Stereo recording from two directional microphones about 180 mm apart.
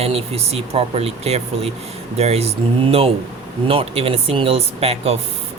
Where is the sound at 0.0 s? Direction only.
35° right (ahead or behind).